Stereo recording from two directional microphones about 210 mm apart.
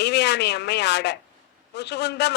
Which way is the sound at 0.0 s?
55° left (ahead or behind).